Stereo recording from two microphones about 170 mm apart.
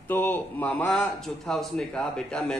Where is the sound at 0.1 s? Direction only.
10° left (ahead or behind).